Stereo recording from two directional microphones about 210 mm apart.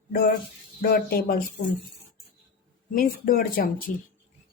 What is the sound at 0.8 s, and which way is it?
Speech, 45° left (ahead or behind).